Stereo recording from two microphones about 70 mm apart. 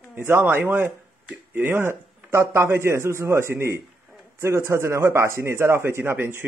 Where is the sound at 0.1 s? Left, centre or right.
Right.